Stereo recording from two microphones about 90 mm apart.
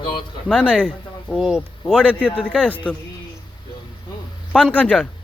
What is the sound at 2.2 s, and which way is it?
Speech, 15° left (ahead or behind).